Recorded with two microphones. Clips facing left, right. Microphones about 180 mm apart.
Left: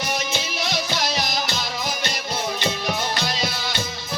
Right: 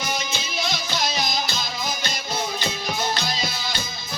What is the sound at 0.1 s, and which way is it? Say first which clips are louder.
Music: left 3 dB; 75° left (ahead or behind).